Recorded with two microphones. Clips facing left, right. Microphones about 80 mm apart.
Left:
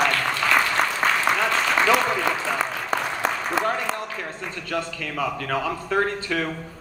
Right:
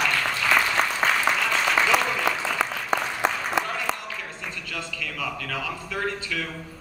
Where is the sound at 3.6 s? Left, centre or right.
Left.